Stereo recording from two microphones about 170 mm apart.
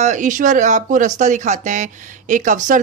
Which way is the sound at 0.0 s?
45° right (ahead or behind).